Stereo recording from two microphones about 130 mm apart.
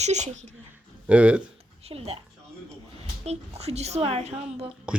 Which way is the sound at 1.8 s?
50° right (ahead or behind).